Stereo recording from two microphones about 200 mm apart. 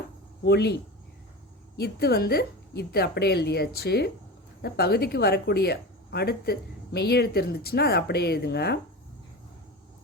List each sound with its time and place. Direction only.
0.4 s speech: 55° left (ahead or behind)